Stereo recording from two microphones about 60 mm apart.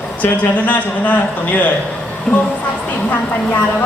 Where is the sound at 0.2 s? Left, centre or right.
Left.